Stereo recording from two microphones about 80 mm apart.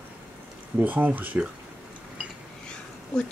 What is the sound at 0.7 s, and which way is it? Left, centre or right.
Speech, right.